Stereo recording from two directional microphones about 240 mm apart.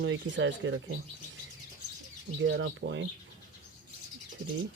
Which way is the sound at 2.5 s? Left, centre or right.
Right.